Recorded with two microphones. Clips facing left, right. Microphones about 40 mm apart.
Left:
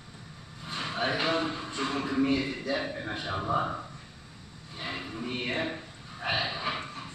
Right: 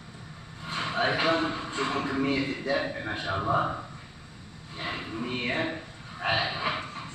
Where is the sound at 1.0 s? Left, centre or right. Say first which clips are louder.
Right 3 dB; right.